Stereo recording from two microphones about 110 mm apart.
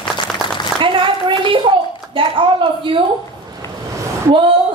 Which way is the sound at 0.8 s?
50° right (ahead or behind).